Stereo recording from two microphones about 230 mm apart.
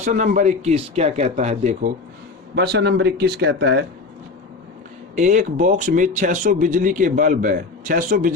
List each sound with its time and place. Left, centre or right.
0.0 s speech: right
2.6 s speech: right
5.1 s speech: right